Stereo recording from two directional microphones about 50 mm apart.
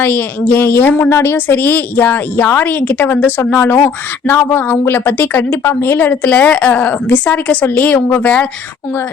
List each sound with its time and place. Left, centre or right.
0.0 s a woman's voice: left
1.5 s speech: left
5.6 s a woman's voice: left
6.0 s speech: left